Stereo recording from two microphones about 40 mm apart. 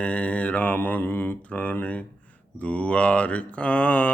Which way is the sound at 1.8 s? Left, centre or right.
Left.